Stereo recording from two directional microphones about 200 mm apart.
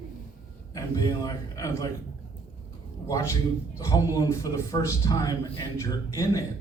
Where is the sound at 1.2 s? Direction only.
15° left (ahead or behind).